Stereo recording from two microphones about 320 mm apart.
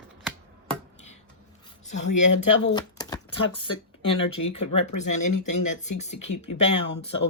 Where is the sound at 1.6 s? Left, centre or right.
Centre.